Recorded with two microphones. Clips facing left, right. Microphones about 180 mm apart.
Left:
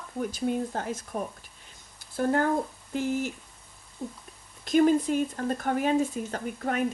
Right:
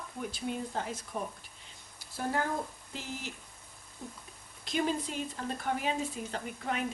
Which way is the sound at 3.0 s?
50° left (ahead or behind).